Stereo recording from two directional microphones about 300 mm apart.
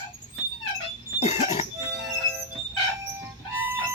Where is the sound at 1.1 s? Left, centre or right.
Left.